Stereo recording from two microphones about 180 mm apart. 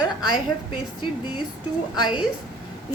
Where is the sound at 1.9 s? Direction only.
25° left (ahead or behind).